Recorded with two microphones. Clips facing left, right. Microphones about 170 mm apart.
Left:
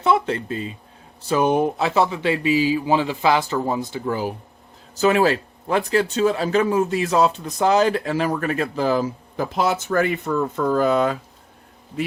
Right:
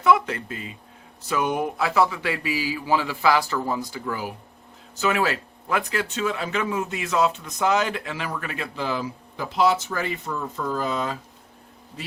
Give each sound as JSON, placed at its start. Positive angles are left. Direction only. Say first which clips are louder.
{"t": 0.0, "sound": "a man's voice", "louder": "left 1 dB", "side_deg": 30}